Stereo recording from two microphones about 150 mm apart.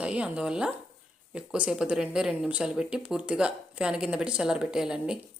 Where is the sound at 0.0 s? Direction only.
5° right (ahead or behind).